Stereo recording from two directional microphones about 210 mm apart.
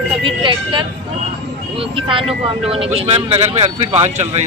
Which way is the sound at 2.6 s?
25° right (ahead or behind).